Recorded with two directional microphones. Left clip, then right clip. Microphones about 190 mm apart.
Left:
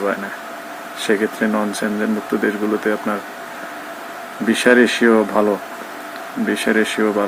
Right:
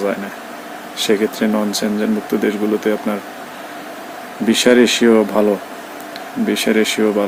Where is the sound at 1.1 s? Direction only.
20° right (ahead or behind).